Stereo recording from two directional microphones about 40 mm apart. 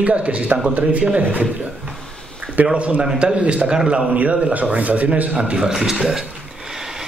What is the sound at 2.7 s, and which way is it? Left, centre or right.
A man's voice, right.